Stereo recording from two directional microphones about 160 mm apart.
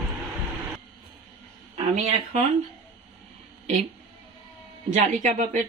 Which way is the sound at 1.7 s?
45° right (ahead or behind).